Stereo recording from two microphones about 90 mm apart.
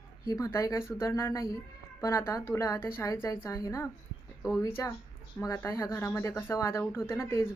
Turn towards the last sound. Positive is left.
turn(degrees=30)  # may be behind; listen again after turning